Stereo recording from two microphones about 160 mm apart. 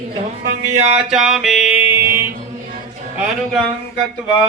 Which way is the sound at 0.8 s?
5° right (ahead or behind).